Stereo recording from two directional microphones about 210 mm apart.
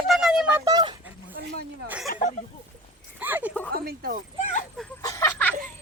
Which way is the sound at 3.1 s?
10° right (ahead or behind).